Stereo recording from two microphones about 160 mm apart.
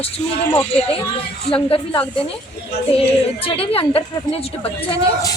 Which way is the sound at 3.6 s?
35° left (ahead or behind).